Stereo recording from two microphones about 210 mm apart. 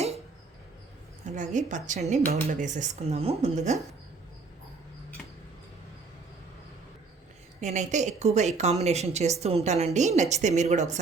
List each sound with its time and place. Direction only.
1.4 s speech: 35° right (ahead or behind)
7.6 s speech: 35° right (ahead or behind)